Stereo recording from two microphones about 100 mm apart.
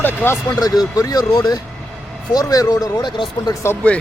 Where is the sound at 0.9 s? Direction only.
40° left (ahead or behind).